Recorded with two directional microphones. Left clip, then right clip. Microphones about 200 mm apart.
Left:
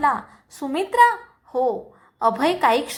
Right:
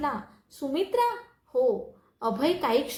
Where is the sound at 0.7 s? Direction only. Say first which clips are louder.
Left 9 dB; 20° left (ahead or behind).